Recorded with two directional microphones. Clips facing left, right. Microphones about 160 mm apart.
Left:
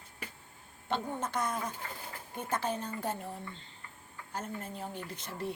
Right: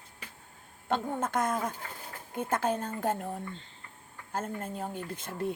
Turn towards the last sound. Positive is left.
turn(degrees=-50)  # may be behind; listen again after turning